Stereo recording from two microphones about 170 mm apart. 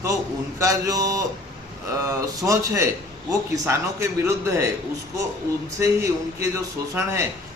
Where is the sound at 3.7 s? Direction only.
15° right (ahead or behind).